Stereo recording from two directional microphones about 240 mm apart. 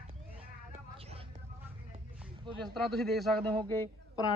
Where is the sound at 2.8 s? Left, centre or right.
Centre.